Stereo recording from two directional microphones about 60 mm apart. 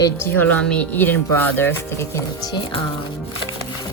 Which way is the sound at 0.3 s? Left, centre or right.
Left.